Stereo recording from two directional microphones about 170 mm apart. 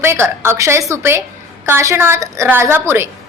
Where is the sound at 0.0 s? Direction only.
15° right (ahead or behind).